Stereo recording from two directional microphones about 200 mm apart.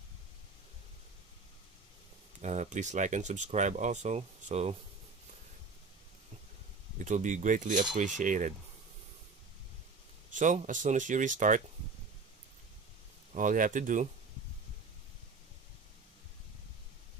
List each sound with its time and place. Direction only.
2.4 s speech: 35° right (ahead or behind)
7.0 s speech: 40° right (ahead or behind)
10.3 s speech: 40° right (ahead or behind)
13.3 s speech: 40° right (ahead or behind)